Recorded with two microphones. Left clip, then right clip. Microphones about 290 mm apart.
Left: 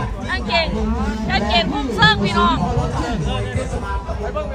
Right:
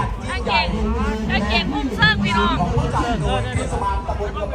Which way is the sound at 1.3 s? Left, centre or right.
Left.